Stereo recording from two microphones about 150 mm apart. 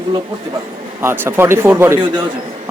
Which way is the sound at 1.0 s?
15° right (ahead or behind).